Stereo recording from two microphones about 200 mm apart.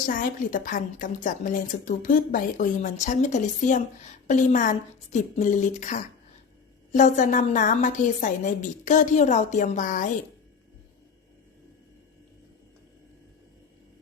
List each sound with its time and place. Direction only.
0.0 s a woman's voice: 40° left (ahead or behind)